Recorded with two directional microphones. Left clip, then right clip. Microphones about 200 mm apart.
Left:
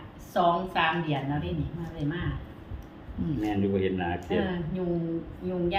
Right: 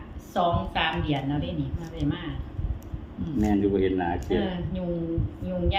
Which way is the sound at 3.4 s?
50° right (ahead or behind).